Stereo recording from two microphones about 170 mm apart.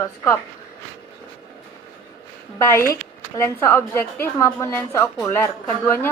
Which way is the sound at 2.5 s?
15° left (ahead or behind).